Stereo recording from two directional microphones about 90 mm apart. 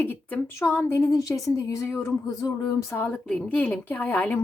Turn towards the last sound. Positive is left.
turn(degrees=20)  # may be behind; listen again after turning